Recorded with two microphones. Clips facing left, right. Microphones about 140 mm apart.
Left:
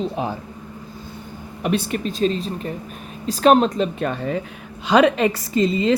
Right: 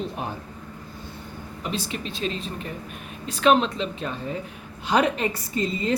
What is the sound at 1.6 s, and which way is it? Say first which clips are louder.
Speech: left 9 dB; 60° left (ahead or behind).